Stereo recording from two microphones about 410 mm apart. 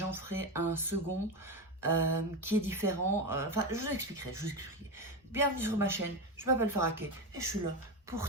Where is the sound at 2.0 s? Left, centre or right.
Right.